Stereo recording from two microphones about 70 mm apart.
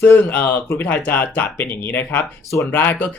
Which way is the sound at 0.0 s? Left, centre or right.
Left.